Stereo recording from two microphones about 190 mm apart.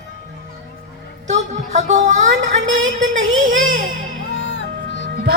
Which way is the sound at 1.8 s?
40° right (ahead or behind).